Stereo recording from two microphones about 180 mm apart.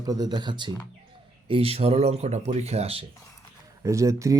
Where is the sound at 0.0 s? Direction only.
20° right (ahead or behind).